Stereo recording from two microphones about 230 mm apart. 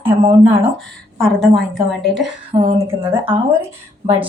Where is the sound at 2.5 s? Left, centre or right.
Right.